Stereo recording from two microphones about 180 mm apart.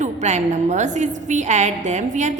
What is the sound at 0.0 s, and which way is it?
A woman's voice, 40° right (ahead or behind).